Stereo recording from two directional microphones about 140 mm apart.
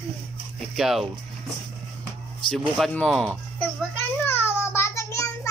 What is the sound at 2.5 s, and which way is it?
Children playing, 5° left (ahead or behind).